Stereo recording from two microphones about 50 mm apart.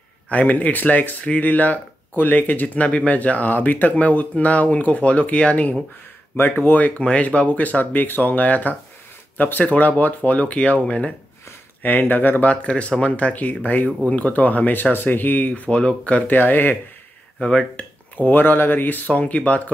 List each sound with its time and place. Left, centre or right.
0.3 s speech: left
6.3 s speech: left
11.8 s speech: left
12.4 s speech: left
16.3 s speech: left
17.4 s speech: centre
18.1 s speech: left